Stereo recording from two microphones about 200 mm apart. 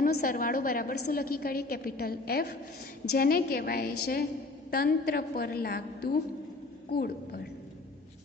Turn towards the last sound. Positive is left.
turn(degrees=50)  # may be behind; listen again after turning